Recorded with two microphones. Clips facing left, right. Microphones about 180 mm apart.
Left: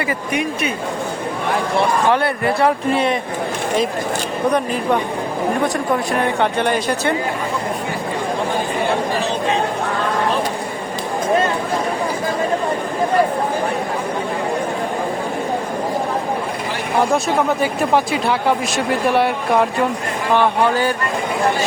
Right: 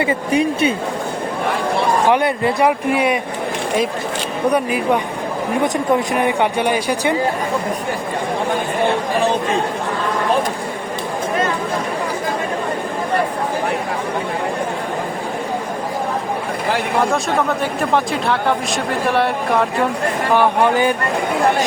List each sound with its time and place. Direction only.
0.0 s speech: 30° right (ahead or behind)
2.0 s speech: 15° right (ahead or behind)
4.5 s speech: 10° right (ahead or behind)
17.6 s speech: centre (ahead or behind)
20.3 s speech: 15° right (ahead or behind)